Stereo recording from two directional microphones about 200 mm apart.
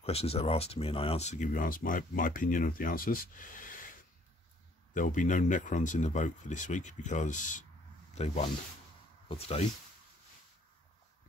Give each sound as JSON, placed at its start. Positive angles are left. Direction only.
{"t": 0.0, "sound": "speech", "side_deg": 30}